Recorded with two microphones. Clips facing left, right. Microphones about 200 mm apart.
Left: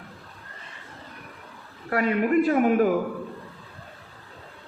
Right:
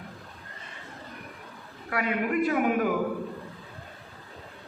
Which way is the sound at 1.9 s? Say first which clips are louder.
Left 5 dB; 40° left (ahead or behind).